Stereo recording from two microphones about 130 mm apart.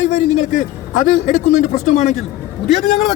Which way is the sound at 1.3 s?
65° left (ahead or behind).